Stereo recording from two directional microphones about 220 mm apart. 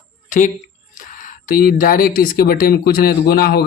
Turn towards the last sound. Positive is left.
turn(degrees=45)  # may be behind; listen again after turning